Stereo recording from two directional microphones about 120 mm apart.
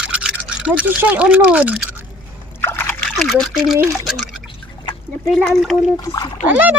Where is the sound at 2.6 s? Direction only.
20° left (ahead or behind).